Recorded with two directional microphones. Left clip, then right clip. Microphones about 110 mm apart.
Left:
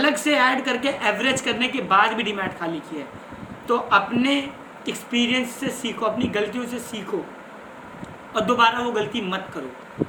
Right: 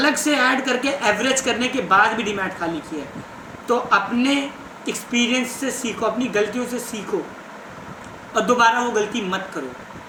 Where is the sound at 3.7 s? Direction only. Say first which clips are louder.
Right 1 dB; 45° left (ahead or behind).